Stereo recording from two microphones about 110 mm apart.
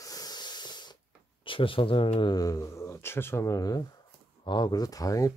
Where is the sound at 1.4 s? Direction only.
50° left (ahead or behind).